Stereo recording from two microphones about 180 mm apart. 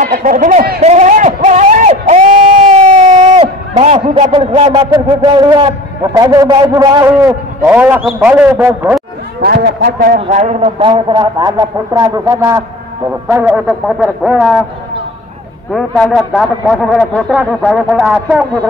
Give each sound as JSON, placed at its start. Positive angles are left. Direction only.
{"t": 0.0, "sound": "a sound", "side_deg": -50}
{"t": 1.9, "sound": "crowd", "side_deg": -40}
{"t": 5.2, "sound": "speech", "side_deg": -25}
{"t": 7.6, "sound": "a man's voice", "side_deg": -10}
{"t": 9.4, "sound": "a man's voice", "side_deg": -60}
{"t": 10.8, "sound": "a man's voice", "side_deg": -25}
{"t": 16.2, "sound": "speech", "side_deg": 5}